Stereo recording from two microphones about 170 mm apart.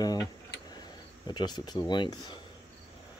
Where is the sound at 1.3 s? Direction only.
25° left (ahead or behind).